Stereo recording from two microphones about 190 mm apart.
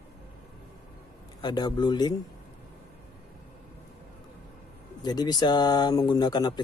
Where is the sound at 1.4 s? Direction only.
20° left (ahead or behind).